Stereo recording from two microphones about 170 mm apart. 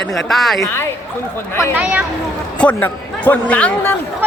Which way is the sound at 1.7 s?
10° right (ahead or behind).